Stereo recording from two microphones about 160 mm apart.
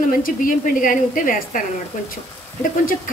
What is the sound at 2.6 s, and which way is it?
Speech, 60° left (ahead or behind).